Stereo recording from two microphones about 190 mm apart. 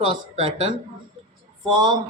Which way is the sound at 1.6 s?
20° right (ahead or behind).